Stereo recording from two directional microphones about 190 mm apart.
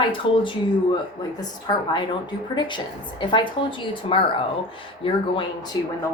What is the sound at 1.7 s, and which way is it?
A woman's voice, 20° left (ahead or behind).